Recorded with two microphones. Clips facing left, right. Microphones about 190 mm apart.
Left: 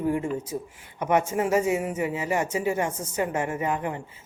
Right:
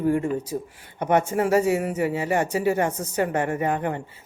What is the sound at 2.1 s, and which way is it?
A woman's voice, 60° right (ahead or behind).